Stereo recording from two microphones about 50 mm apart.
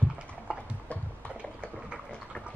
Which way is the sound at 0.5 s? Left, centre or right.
Right.